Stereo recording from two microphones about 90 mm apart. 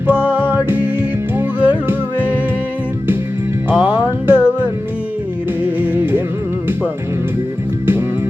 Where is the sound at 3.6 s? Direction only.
20° right (ahead or behind).